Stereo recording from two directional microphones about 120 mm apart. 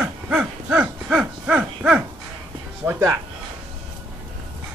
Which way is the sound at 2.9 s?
25° right (ahead or behind).